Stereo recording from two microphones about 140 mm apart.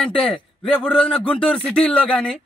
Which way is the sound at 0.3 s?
10° left (ahead or behind).